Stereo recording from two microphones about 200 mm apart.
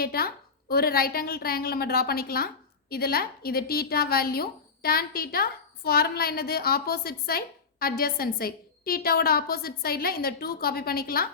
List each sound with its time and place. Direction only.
0.0 s a woman's voice: 50° left (ahead or behind)